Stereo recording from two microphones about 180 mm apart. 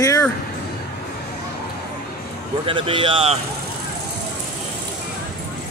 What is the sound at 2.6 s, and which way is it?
Speech, 30° right (ahead or behind).